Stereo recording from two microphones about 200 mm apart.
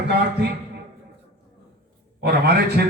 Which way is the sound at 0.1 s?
55° right (ahead or behind).